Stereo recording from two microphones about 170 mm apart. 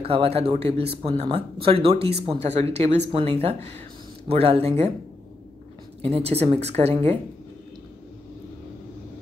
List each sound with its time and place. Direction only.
0.0 s speech: 35° right (ahead or behind)
6.0 s speech: 35° right (ahead or behind)